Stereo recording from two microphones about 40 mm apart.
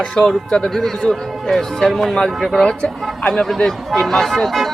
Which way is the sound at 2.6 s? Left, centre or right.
Left.